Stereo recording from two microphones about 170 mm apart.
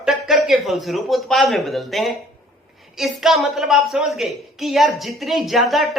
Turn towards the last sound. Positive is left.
turn(degrees=0)  # may be behind; listen again after turning